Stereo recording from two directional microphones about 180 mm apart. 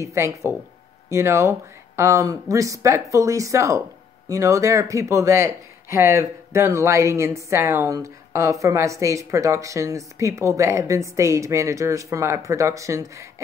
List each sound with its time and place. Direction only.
0.0 s speech: 15° right (ahead or behind)